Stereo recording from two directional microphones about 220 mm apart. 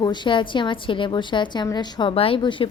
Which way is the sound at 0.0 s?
20° left (ahead or behind).